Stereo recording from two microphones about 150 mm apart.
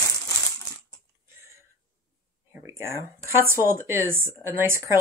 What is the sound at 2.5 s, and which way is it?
Speech, 15° right (ahead or behind).